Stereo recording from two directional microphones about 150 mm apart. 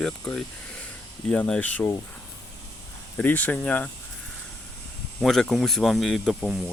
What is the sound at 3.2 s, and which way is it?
Speech, 10° left (ahead or behind).